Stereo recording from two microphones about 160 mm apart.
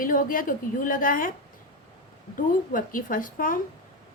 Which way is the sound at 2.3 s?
60° left (ahead or behind).